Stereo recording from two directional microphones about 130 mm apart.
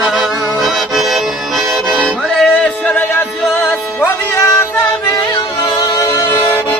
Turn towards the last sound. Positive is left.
turn(degrees=15)  # may be behind; listen again after turning